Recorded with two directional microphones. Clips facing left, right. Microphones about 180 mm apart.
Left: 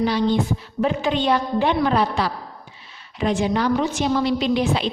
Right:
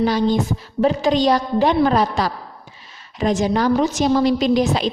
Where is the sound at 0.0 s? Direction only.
45° right (ahead or behind).